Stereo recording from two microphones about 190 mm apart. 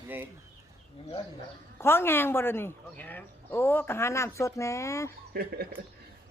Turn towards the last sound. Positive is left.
turn(degrees=-55)  # may be behind; listen again after turning